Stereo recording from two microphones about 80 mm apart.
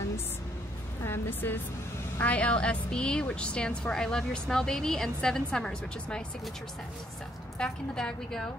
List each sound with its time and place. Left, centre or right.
1.0 s a woman's voice: left; by 6.2 s centre
7.5 s a woman's voice: centre